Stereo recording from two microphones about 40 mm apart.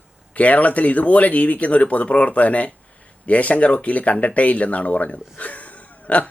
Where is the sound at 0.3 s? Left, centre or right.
Left.